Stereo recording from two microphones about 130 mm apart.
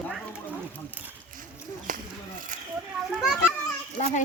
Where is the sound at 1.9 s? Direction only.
90° right.